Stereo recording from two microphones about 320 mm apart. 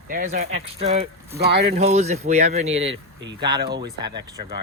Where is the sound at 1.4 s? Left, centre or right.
Right.